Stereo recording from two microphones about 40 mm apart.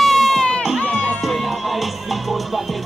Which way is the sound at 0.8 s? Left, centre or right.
Centre.